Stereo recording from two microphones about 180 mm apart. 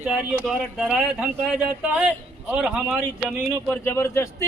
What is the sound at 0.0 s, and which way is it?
Speech, 5° right (ahead or behind).